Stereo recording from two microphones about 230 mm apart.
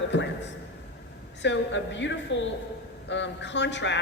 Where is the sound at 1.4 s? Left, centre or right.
Left.